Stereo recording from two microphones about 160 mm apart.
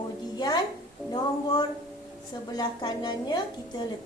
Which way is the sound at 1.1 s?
25° left (ahead or behind).